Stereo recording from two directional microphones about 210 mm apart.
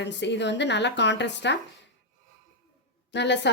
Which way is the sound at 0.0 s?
55° left (ahead or behind).